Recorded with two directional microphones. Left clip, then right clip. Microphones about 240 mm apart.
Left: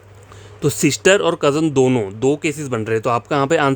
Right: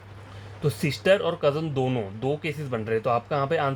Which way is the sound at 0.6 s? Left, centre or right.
Left.